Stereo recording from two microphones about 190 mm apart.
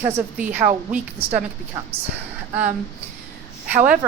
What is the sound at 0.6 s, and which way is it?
Speech, 35° right (ahead or behind).